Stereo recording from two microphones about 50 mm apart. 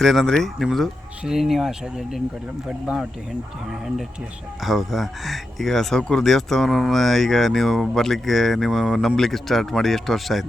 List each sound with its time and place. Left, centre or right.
0.0 s speech: centre
3.7 s speech: centre